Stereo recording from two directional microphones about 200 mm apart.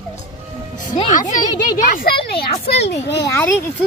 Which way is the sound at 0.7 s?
40° left (ahead or behind).